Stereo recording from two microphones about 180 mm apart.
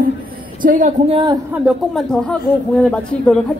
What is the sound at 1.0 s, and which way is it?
Speech, 25° right (ahead or behind).